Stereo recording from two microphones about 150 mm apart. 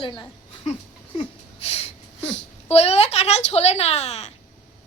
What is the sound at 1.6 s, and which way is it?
Speech, 40° left (ahead or behind).